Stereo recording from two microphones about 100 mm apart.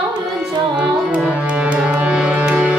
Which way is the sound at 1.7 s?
15° right (ahead or behind).